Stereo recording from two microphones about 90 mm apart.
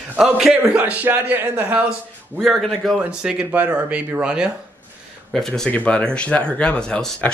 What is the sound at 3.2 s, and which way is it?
Speech, 10° right (ahead or behind).